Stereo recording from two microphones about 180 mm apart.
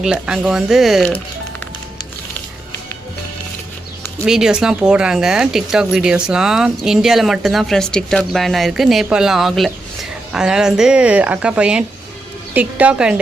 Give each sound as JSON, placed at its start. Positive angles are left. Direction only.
{"t": 0.0, "sound": "speech", "side_deg": -5}
{"t": 4.3, "sound": "a woman's voice", "side_deg": -5}